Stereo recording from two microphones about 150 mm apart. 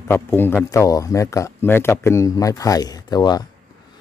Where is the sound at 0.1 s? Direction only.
15° left (ahead or behind).